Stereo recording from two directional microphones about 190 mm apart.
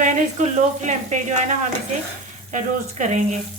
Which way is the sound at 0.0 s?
40° right (ahead or behind).